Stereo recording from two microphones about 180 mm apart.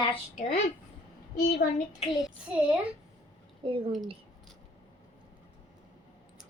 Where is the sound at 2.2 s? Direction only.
5° right (ahead or behind).